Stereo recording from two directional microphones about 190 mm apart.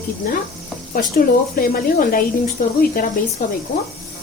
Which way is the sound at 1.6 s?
50° left (ahead or behind).